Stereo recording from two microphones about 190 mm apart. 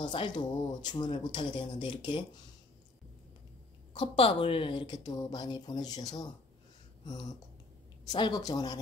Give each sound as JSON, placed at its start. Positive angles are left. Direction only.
{"t": 0.0, "sound": "a woman's voice", "side_deg": 25}
{"t": 3.9, "sound": "a woman's voice", "side_deg": 30}